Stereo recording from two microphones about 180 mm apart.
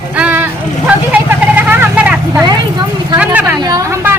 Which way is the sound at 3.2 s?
10° right (ahead or behind).